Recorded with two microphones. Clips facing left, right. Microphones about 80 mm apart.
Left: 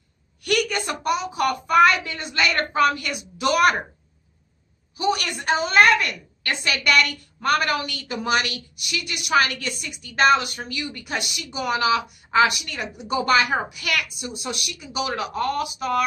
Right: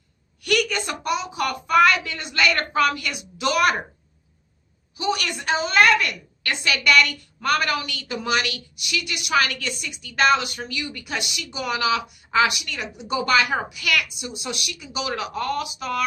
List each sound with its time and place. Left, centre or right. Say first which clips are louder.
0.4 s a woman's voice: even; left
5.1 s a woman's voice: left 1 dB; left